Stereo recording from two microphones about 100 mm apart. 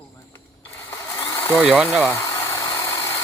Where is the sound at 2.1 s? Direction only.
25° left (ahead or behind).